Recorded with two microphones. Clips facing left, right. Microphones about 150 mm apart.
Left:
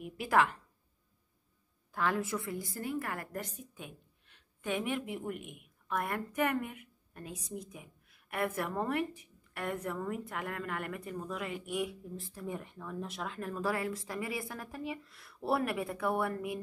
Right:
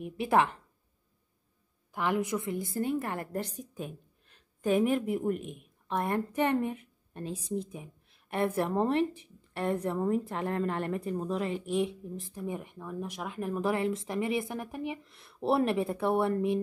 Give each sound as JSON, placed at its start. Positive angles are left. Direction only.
{"t": 0.2, "sound": "a woman's voice", "side_deg": -25}
{"t": 1.9, "sound": "a woman's voice", "side_deg": -15}